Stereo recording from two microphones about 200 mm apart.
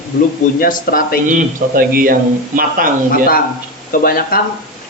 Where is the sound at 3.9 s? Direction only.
45° left (ahead or behind).